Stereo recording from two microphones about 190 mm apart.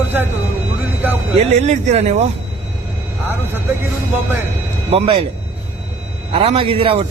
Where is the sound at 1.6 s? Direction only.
35° right (ahead or behind).